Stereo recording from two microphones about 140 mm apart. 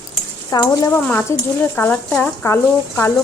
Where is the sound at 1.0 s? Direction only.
10° left (ahead or behind).